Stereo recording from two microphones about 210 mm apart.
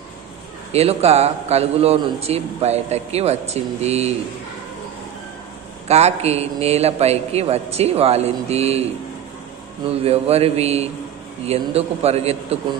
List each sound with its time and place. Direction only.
0.7 s a man's voice: 30° right (ahead or behind)
5.9 s a man's voice: 30° right (ahead or behind)
9.8 s a man's voice: 30° right (ahead or behind)